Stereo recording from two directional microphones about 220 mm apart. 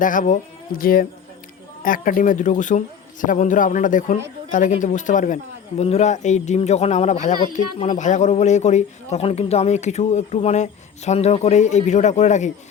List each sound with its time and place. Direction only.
0.0 s a man's voice: 35° left (ahead or behind)